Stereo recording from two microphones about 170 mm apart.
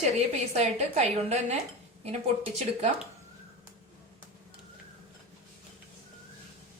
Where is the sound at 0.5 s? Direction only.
40° right (ahead or behind).